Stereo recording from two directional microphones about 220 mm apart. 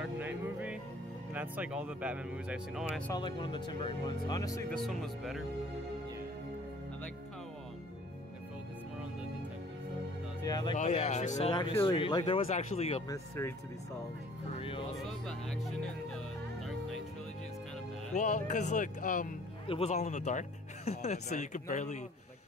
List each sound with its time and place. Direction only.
0.0 s music: 5° right (ahead or behind)
1.3 s speech: 10° right (ahead or behind)
3.1 s speech: 20° left (ahead or behind)
4.6 s speech: centre (ahead or behind)
10.4 s speech: 20° left (ahead or behind)
10.8 s speech: 30° left (ahead or behind)
14.6 s music: 25° left (ahead or behind)
15.6 s speech: centre (ahead or behind)
18.1 s speech: 35° left (ahead or behind)